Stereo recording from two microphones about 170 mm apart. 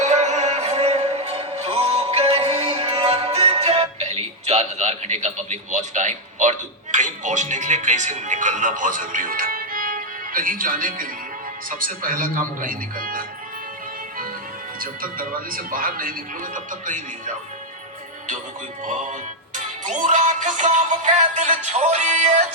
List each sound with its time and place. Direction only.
0.0 s music: 45° right (ahead or behind)
11.7 s a man's voice: 55° right (ahead or behind)
14.8 s a man's voice: 55° right (ahead or behind)
19.5 s music: 45° right (ahead or behind)